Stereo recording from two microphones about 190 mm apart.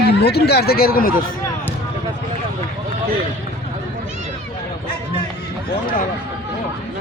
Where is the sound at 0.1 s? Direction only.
60° left (ahead or behind).